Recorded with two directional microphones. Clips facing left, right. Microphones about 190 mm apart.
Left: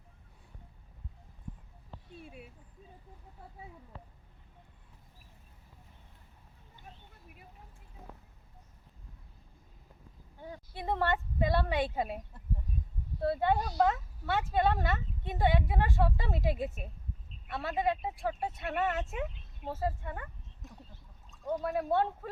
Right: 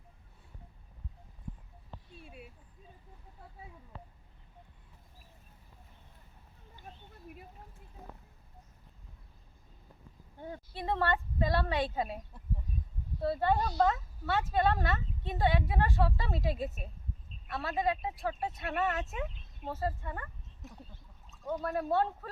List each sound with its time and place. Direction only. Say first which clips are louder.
10.8 s a woman's voice: even; 15° left (ahead or behind)
13.4 s a woman's voice: even; 15° left (ahead or behind)
21.4 s speech: left 1 dB; 10° left (ahead or behind)